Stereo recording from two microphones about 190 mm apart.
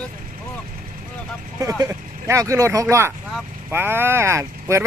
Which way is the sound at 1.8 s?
15° right (ahead or behind).